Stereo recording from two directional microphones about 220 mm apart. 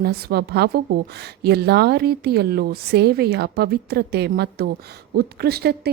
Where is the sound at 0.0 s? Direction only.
45° right (ahead or behind).